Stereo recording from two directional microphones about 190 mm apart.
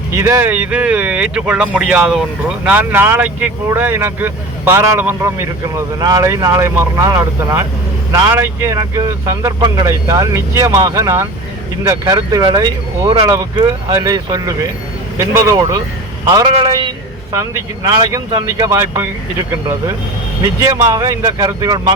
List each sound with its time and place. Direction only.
0.2 s a man's voice: 10° right (ahead or behind)
20.6 s speech: 15° right (ahead or behind)